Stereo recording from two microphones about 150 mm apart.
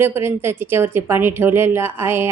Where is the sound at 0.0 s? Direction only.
15° right (ahead or behind).